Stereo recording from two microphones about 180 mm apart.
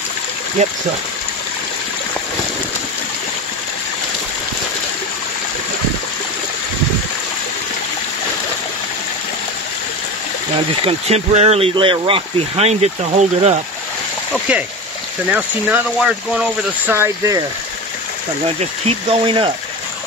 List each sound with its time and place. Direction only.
0.6 s speech: 40° right (ahead or behind)
10.9 s speech: 35° right (ahead or behind)
15.3 s speech: 5° right (ahead or behind)
18.9 s speech: 30° right (ahead or behind)